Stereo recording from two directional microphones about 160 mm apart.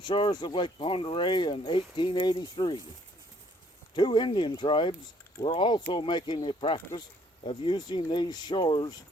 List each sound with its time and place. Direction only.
0.0 s speech: 30° left (ahead or behind)
3.9 s speech: 25° left (ahead or behind)